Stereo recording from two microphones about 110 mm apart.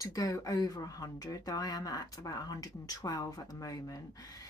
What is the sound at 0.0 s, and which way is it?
Speech, 30° left (ahead or behind).